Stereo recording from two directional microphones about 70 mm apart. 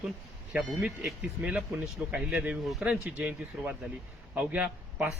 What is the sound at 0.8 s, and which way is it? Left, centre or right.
Speech, centre.